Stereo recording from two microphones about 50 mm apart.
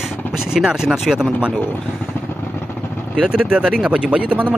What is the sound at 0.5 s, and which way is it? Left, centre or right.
Speech, centre.